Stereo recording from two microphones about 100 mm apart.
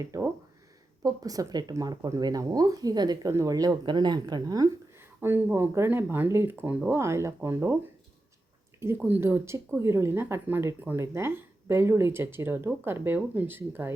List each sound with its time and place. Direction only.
0.0 s speech: 30° right (ahead or behind)
4.9 s speech: 25° right (ahead or behind)
9.0 s speech: 20° right (ahead or behind)